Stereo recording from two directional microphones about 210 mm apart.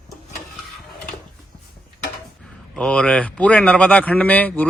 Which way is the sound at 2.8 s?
5° left (ahead or behind).